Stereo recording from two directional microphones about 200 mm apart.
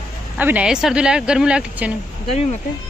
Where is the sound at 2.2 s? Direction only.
35° left (ahead or behind).